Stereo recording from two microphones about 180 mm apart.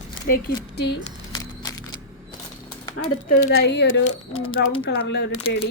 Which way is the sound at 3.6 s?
80° left.